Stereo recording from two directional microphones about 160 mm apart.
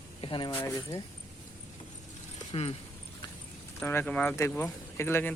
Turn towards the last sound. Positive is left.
turn(degrees=15)  # may be behind; listen again after turning